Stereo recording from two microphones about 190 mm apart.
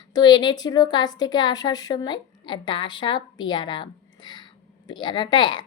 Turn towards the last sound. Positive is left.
turn(degrees=25)  # may be behind; listen again after turning